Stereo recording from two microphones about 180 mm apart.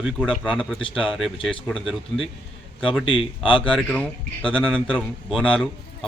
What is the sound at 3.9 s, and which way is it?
A man's voice, 5° left (ahead or behind).